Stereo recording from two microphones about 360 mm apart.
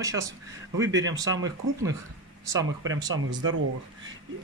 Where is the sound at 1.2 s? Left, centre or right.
Centre.